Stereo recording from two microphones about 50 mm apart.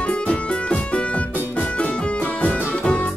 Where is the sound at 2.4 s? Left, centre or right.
Left.